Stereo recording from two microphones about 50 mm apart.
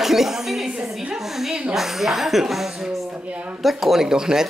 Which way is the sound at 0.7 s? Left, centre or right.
Centre.